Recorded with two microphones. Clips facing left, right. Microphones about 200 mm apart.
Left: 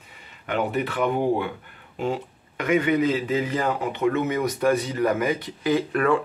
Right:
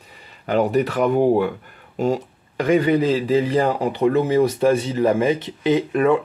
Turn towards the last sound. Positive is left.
turn(degrees=-20)  # may be behind; listen again after turning